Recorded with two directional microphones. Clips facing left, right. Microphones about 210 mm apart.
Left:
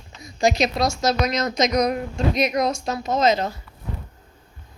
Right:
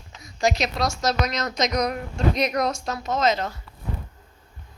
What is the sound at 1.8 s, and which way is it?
Speech, 20° left (ahead or behind).